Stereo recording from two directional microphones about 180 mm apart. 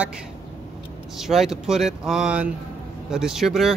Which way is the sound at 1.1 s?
Centre (ahead or behind).